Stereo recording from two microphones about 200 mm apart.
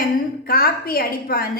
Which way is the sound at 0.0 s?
45° left (ahead or behind).